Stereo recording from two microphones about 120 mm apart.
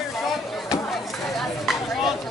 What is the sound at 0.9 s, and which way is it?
Chatter, centre (ahead or behind).